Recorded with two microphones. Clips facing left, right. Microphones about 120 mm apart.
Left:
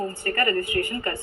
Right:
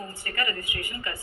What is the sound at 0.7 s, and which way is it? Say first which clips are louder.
Speech: left 11 dB; 40° left (ahead or behind).